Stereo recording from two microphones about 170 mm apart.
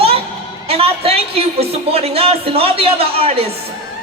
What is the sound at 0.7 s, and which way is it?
Speech, 35° right (ahead or behind).